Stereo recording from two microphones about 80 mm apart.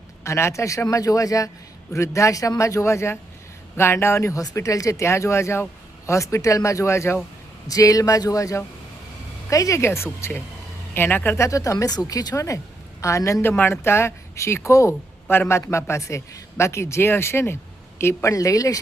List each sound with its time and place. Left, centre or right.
0.3 s speech: left
7.7 s speech: left
11.3 s speech: left
13.5 s speech: left